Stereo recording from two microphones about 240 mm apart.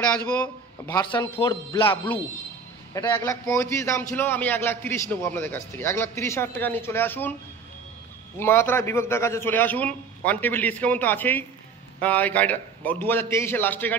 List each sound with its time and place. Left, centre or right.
0.0 s a man's voice: centre
8.4 s a man's voice: centre